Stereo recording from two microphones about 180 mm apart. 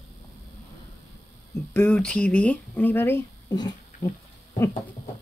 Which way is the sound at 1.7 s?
5° left (ahead or behind).